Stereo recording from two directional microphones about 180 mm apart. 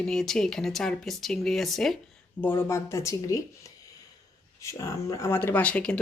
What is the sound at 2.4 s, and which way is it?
Speech, 10° left (ahead or behind).